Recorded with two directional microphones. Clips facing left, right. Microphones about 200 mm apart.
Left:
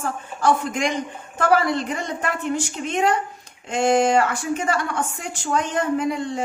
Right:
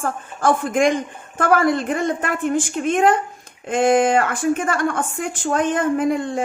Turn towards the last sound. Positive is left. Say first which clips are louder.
# right 3 dB
turn(degrees=-50)  # may be behind; listen again after turning